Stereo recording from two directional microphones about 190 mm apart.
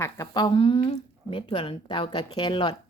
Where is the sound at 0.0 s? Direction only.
20° left (ahead or behind).